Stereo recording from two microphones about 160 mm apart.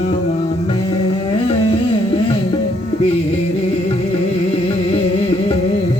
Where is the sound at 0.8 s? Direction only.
35° left (ahead or behind).